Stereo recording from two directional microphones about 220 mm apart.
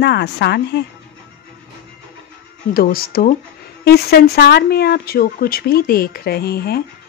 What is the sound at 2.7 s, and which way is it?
Speech, 45° left (ahead or behind).